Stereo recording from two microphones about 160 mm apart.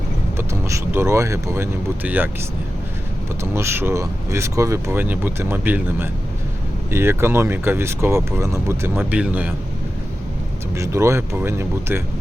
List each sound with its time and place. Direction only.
0.3 s speech: 15° right (ahead or behind)
3.5 s speech: 15° right (ahead or behind)
10.8 s speech: 15° right (ahead or behind)